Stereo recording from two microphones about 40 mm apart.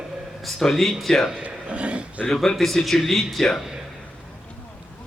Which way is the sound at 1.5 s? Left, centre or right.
Right.